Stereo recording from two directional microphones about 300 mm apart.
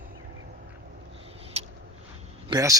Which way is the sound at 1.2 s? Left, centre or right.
Centre.